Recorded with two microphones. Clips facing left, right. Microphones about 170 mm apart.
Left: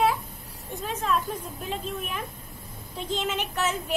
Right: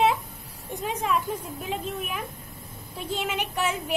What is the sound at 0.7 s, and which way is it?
A woman's voice, 15° right (ahead or behind).